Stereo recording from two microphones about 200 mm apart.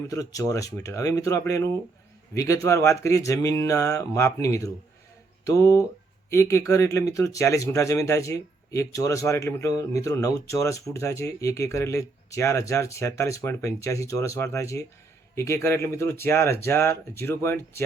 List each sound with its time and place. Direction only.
0.1 s speech: 15° left (ahead or behind)